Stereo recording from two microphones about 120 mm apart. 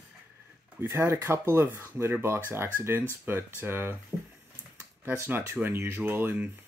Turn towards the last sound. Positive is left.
turn(degrees=-15)  # may be behind; listen again after turning